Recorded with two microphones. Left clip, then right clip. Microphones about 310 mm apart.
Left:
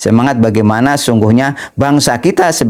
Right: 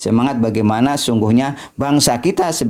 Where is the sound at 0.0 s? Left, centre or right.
Left.